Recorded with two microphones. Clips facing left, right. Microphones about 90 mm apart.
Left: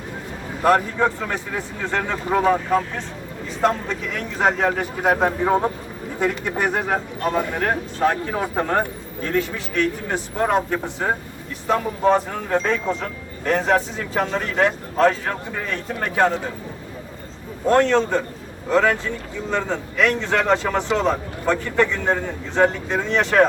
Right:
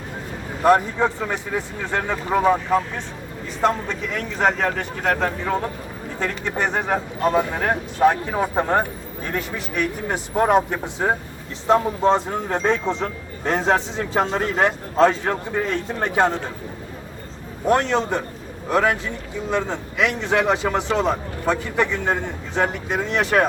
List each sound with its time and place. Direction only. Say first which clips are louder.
0.6 s speech: right 1 dB; 20° right (ahead or behind); by 6.9 s 5° left (ahead or behind)
6.9 s speech: right 2 dB; 10° right (ahead or behind)
17.7 s speech: left 2 dB; 15° right (ahead or behind)